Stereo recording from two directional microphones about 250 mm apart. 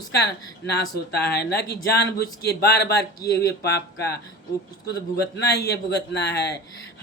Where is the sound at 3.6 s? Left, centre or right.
Left.